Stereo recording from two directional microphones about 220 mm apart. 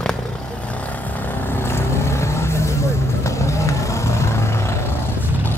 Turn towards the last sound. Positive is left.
turn(degrees=15)  # may be behind; listen again after turning